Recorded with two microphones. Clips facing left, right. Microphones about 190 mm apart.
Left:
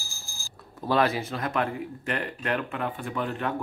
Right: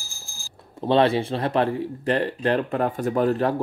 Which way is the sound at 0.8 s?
25° right (ahead or behind).